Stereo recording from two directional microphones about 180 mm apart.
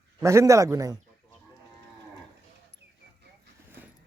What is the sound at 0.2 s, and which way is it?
Speech, 15° right (ahead or behind).